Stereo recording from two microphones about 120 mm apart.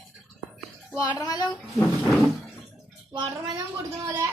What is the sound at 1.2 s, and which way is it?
Speech, 30° left (ahead or behind).